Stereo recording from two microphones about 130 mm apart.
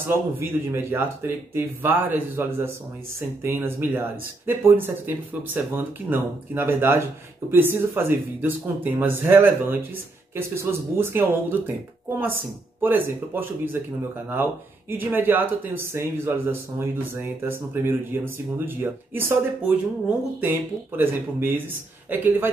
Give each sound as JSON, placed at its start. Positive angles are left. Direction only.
{"t": 0.0, "sound": "speech", "side_deg": -15}
{"t": 20.3, "sound": "speech", "side_deg": -15}